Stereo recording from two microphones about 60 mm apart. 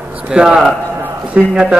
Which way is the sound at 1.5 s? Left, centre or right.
Centre.